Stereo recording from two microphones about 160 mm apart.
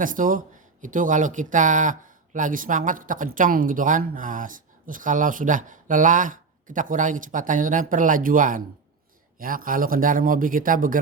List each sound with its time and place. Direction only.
0.0 s speech: 55° right (ahead or behind)